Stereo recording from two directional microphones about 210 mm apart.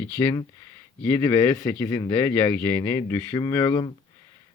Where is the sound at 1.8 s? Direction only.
15° left (ahead or behind).